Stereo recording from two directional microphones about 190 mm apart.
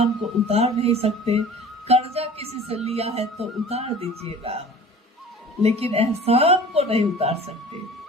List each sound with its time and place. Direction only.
0.0 s speech: 30° right (ahead or behind)
5.6 s speech: 30° right (ahead or behind)